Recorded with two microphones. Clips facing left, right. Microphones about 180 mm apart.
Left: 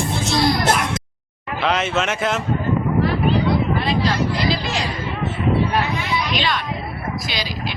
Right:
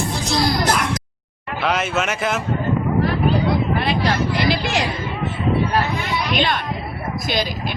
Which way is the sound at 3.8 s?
65° right (ahead or behind).